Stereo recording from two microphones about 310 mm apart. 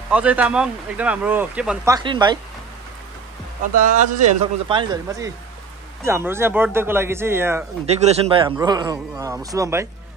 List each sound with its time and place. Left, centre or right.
0.1 s speech: centre
3.7 s speech: right; by 7.6 s centre
7.8 s speech: right